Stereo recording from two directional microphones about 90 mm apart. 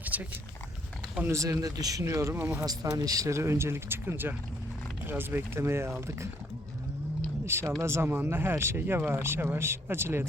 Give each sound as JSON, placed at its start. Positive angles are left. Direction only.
{"t": 0.0, "sound": "dog", "side_deg": -20}
{"t": 1.2, "sound": "speech", "side_deg": -35}
{"t": 2.2, "sound": "speech", "side_deg": -25}
{"t": 2.6, "sound": "speech", "side_deg": -40}
{"t": 7.4, "sound": "a sound", "side_deg": -30}
{"t": 7.8, "sound": "speech", "side_deg": -30}